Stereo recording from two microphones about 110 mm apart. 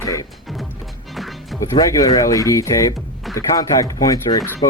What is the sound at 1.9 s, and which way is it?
Speech, 30° left (ahead or behind).